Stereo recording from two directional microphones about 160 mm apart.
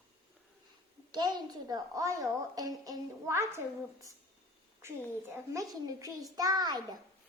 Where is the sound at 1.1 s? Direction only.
25° right (ahead or behind).